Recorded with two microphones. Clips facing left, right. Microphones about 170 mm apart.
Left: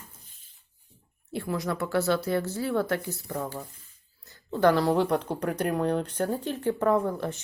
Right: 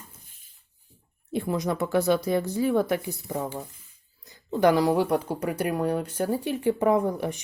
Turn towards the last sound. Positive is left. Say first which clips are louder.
# right 2 dB
turn(degrees=-15)  # may be behind; listen again after turning